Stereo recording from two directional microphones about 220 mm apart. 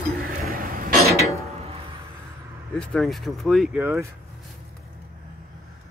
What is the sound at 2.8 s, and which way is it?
Speech, centre (ahead or behind).